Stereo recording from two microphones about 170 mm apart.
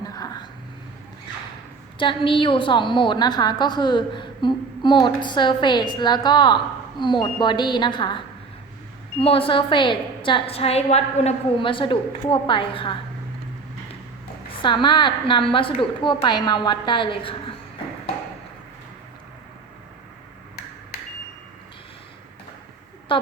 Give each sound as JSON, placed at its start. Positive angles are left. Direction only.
{"t": 0.0, "sound": "vehicle", "side_deg": 20}
{"t": 2.0, "sound": "a woman's voice", "side_deg": 30}
{"t": 9.2, "sound": "a woman's voice", "side_deg": 35}
{"t": 14.6, "sound": "a woman's voice", "side_deg": 30}